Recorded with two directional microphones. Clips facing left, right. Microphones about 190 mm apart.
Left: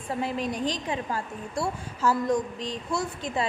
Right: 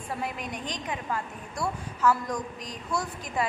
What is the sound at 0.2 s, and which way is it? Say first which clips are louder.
A woman's voice: left 6 dB; 30° left (ahead or behind).